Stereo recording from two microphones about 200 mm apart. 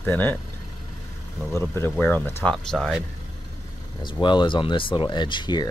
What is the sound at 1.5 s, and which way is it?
Speech, 10° left (ahead or behind).